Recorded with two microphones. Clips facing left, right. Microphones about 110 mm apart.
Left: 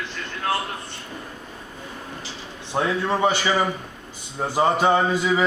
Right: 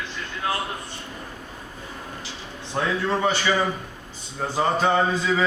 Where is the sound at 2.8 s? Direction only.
15° left (ahead or behind).